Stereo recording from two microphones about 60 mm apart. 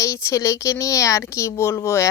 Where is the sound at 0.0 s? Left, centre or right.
Left.